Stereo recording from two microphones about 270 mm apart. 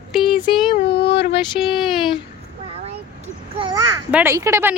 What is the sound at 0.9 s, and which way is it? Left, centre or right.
Female singing, left.